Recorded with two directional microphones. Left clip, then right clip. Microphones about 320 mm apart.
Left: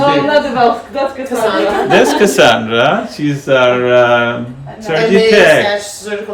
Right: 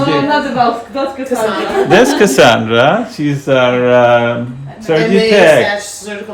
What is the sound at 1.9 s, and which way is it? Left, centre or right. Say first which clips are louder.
Speech: right 2 dB; right.